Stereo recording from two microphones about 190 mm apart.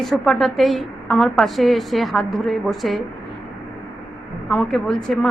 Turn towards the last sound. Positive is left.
turn(degrees=0)  # may be behind; listen again after turning